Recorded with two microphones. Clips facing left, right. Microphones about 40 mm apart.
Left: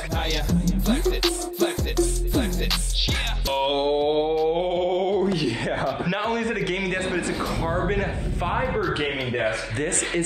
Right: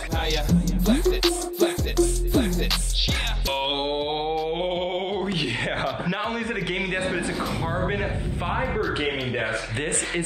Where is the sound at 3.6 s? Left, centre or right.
Right.